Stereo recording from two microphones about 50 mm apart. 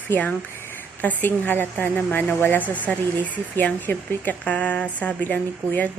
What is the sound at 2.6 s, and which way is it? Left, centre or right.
Speech, left.